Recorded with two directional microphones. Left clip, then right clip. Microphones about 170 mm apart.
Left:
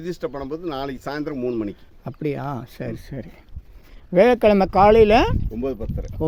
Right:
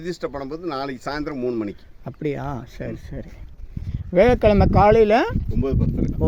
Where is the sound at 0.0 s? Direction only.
10° left (ahead or behind).